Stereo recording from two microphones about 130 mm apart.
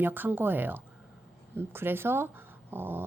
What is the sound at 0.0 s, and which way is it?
Speech, 15° right (ahead or behind).